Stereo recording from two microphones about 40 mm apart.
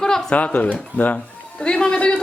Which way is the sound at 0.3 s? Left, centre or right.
Left.